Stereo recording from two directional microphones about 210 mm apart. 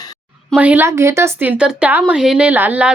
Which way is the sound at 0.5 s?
5° right (ahead or behind).